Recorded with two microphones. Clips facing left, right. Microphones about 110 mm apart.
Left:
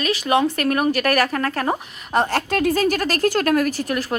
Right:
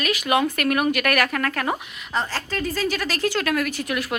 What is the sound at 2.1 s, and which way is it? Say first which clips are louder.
A woman's voice: left 7 dB; 60° left (ahead or behind).